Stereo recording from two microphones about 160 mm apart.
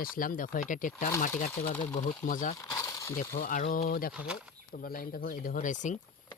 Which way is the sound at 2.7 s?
20° left (ahead or behind).